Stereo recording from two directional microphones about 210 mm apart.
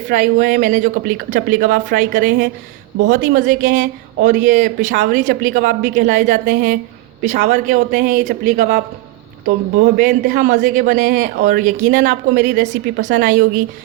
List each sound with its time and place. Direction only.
0.1 s speech: 45° right (ahead or behind)
3.1 s speech: 40° right (ahead or behind)
10.0 s speech: 50° right (ahead or behind)